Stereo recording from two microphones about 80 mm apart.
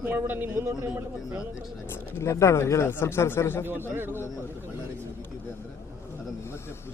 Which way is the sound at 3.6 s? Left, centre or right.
Right.